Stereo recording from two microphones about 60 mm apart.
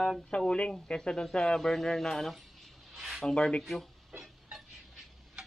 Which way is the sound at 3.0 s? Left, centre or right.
Centre.